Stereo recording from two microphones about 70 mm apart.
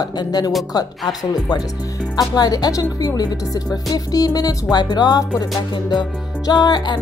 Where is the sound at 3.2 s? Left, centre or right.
Left.